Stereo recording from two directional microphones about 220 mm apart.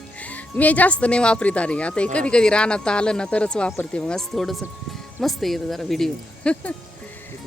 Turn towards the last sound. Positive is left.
turn(degrees=5)  # may be behind; listen again after turning